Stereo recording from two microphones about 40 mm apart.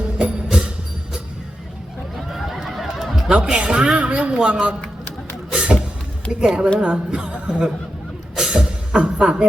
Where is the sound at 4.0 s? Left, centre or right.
Right.